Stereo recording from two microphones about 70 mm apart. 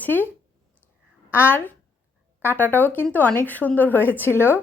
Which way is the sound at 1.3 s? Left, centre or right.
Left.